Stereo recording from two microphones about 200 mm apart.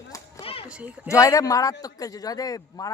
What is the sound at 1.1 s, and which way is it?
A man's voice, 15° left (ahead or behind).